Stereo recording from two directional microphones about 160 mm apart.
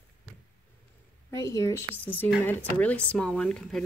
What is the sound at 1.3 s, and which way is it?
Speech, 20° left (ahead or behind).